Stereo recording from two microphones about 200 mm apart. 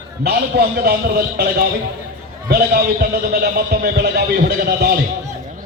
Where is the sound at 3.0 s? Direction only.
50° right (ahead or behind).